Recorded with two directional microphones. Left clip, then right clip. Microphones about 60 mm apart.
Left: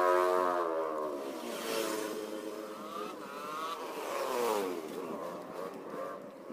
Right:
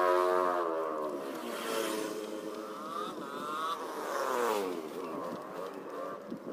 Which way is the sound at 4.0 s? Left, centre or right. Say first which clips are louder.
Left 1 dB; left.